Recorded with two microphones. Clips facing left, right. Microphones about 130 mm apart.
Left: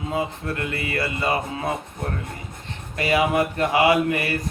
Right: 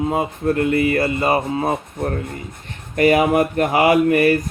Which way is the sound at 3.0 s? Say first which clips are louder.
Right 6 dB; 45° right (ahead or behind).